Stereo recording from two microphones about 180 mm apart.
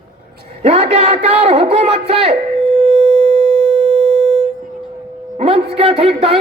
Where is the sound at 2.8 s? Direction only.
30° right (ahead or behind).